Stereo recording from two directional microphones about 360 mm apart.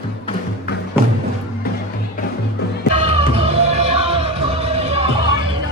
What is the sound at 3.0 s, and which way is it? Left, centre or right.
Music, centre.